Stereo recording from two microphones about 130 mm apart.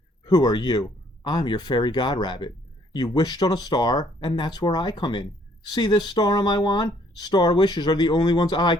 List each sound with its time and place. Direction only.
0.3 s speech: 30° left (ahead or behind)